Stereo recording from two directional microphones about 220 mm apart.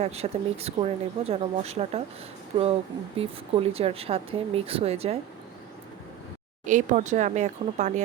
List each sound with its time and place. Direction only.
0.0 s speech: 30° right (ahead or behind)
6.7 s speech: 35° right (ahead or behind)